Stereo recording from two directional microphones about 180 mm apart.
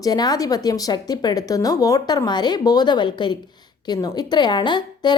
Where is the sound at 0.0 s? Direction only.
20° left (ahead or behind).